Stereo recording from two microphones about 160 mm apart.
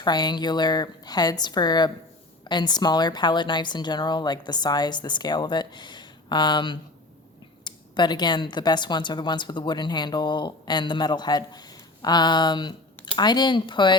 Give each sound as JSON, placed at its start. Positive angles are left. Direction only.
{"t": 0.0, "sound": "speech", "side_deg": 25}